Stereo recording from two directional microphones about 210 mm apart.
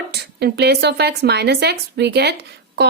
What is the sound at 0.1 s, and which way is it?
A woman's voice, 50° right (ahead or behind).